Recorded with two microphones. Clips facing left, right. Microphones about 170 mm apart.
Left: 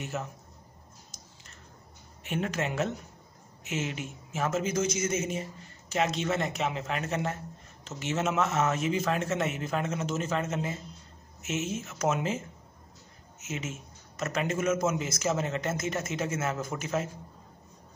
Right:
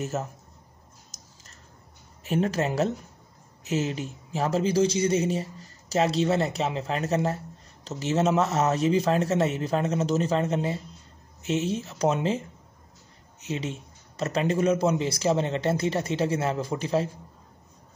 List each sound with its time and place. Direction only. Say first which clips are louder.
0.0 s a man's voice: right 5 dB; 40° right (ahead or behind)
1.1 s a sound: left 1 dB; 40° right (ahead or behind)
2.2 s a man's voice: right 6 dB; 35° right (ahead or behind)